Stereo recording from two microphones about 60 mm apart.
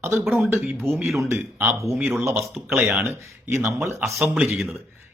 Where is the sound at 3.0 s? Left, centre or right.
Right.